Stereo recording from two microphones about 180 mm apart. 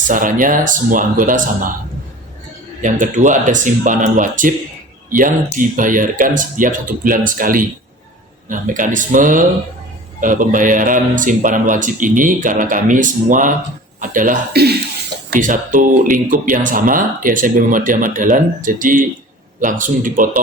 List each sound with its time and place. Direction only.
0.1 s speech: 50° right (ahead or behind)
2.8 s speech: 45° right (ahead or behind); by 14.8 s 60° right (ahead or behind)
15.3 s speech: 45° right (ahead or behind)